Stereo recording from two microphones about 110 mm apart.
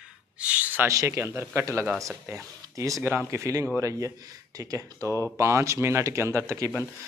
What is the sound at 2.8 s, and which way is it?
Speech, 25° right (ahead or behind).